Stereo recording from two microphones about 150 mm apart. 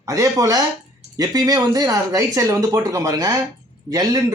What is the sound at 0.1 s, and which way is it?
Speech, 20° right (ahead or behind).